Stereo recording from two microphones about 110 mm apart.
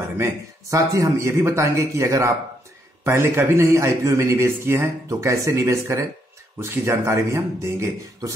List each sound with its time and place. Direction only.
0.2 s a man's voice: 30° right (ahead or behind)